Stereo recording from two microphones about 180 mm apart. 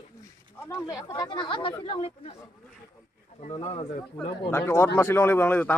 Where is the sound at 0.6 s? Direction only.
15° left (ahead or behind).